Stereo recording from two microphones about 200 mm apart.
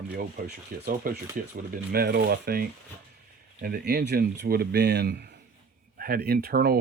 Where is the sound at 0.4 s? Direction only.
50° right (ahead or behind).